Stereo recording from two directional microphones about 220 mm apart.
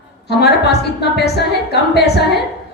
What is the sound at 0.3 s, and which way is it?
A woman's voice, 50° left (ahead or behind).